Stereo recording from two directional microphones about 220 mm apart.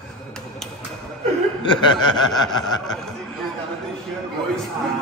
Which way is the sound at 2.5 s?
20° left (ahead or behind).